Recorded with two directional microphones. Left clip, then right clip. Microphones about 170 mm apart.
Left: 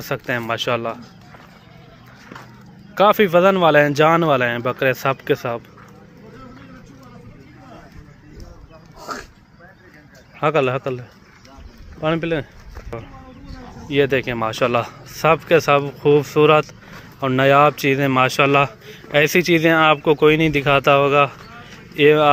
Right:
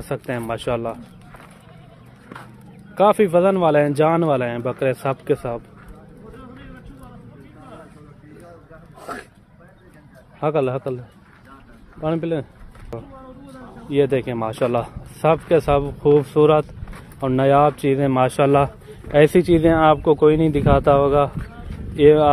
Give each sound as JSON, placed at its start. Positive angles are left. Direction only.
{"t": 0.0, "sound": "speech", "side_deg": -10}
{"t": 2.9, "sound": "speech", "side_deg": -5}
{"t": 10.4, "sound": "speech", "side_deg": 0}
{"t": 12.0, "sound": "speech", "side_deg": -5}
{"t": 13.8, "sound": "speech", "side_deg": -10}